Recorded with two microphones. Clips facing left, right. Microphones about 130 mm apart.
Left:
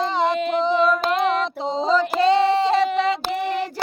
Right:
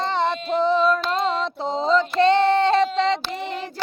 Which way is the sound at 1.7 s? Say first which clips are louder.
Even; centre (ahead or behind).